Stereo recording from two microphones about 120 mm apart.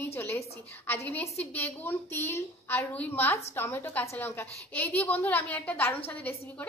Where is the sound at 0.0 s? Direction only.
20° left (ahead or behind).